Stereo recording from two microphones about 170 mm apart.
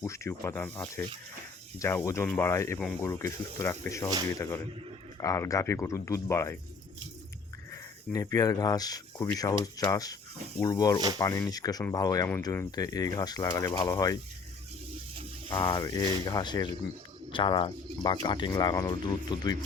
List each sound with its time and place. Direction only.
0.0 s speech: 15° left (ahead or behind)
7.7 s speech: 20° left (ahead or behind)
15.4 s speech: 25° left (ahead or behind)